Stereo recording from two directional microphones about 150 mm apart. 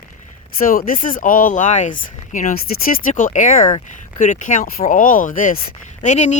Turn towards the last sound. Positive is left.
turn(degrees=50)  # may be behind; listen again after turning